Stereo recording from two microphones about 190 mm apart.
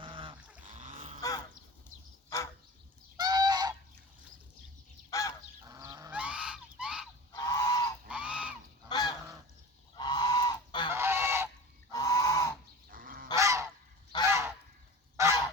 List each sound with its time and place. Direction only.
0.0 s a sound: 25° right (ahead or behind)
0.7 s a sound: 40° right (ahead or behind)
2.3 s fowl: 15° left (ahead or behind)
3.2 s goose: 20° right (ahead or behind)
5.1 s goose: 15° left (ahead or behind)
5.6 s goose: 20° right (ahead or behind)
6.1 s goose: 5° right (ahead or behind)
7.3 s goose: 15° left (ahead or behind)
8.0 s goose: 5° right (ahead or behind)
8.9 s goose: 20° left (ahead or behind)
10.9 s goose: 15° right (ahead or behind)
11.9 s goose: 20° left (ahead or behind)
12.9 s goose: 50° right (ahead or behind)
13.3 s goose: 15° right (ahead or behind)